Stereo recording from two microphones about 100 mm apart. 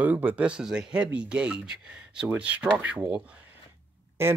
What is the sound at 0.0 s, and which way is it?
Speech, 15° right (ahead or behind).